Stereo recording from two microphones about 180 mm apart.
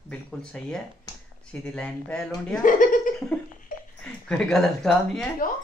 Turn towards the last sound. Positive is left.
turn(degrees=5)  # may be behind; listen again after turning